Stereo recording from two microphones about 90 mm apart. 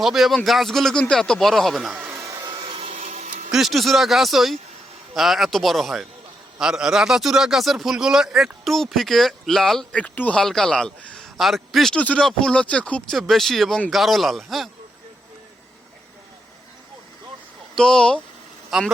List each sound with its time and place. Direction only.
0.0 s a man's voice: centre (ahead or behind)
2.4 s vacuum cleaner: 65° right (ahead or behind)
3.5 s a man's voice: centre (ahead or behind)
9.9 s speech: 15° left (ahead or behind)
11.3 s a man's voice: centre (ahead or behind)
11.9 s speech: 15° left (ahead or behind)
13.1 s a man's voice: centre (ahead or behind)
17.7 s a man's voice: 5° left (ahead or behind)